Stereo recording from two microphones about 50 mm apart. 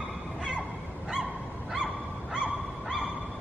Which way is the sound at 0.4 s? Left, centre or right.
Right.